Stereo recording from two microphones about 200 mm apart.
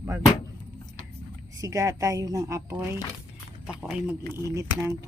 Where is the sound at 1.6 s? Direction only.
15° right (ahead or behind).